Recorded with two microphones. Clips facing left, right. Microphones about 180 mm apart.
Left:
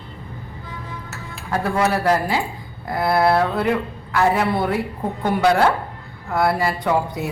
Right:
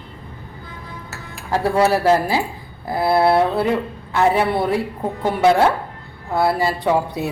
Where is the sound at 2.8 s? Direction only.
30° right (ahead or behind).